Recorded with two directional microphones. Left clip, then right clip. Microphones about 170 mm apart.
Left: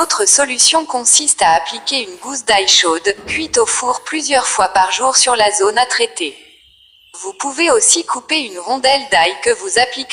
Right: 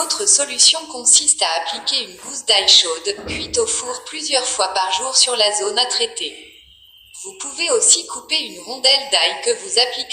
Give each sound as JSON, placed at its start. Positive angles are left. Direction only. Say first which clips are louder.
{"t": 0.0, "sound": "a woman's voice", "louder": "left 6 dB", "side_deg": 45}